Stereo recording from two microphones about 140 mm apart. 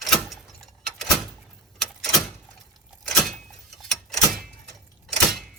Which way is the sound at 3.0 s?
Centre (ahead or behind).